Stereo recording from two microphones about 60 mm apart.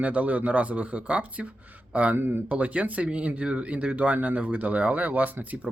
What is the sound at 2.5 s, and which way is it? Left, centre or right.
Speech, right.